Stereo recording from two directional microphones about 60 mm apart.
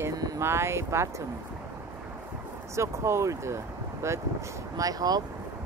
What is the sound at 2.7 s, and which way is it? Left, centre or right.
Speech, right.